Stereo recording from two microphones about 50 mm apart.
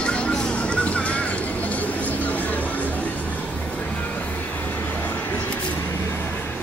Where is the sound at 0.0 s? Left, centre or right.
Left.